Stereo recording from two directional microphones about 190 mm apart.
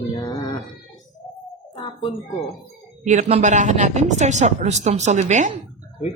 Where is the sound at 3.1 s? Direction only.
35° right (ahead or behind).